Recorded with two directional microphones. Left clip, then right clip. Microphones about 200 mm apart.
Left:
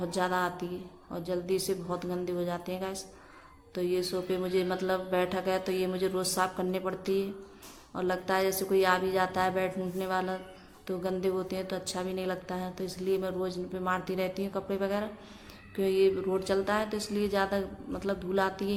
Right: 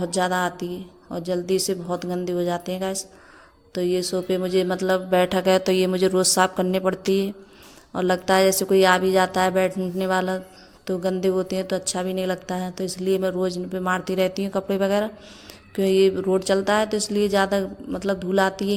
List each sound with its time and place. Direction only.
0.0 s a woman's voice: 35° right (ahead or behind)